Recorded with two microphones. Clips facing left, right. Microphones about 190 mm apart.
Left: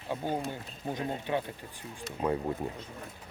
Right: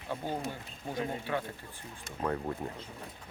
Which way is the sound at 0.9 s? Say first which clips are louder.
Left 1 dB; 20° left (ahead or behind).